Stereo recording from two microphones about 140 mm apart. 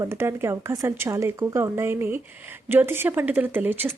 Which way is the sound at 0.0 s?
20° right (ahead or behind).